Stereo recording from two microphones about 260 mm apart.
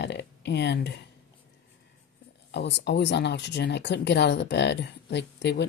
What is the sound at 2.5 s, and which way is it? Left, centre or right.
Speech, left.